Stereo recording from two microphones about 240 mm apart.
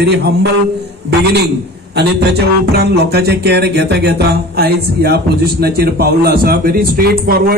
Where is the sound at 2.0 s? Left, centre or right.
Right.